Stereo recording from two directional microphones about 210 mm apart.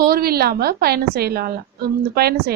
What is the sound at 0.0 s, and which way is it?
A woman's voice, 45° right (ahead or behind).